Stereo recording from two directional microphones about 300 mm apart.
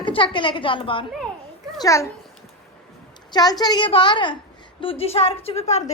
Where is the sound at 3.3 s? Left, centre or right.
Centre.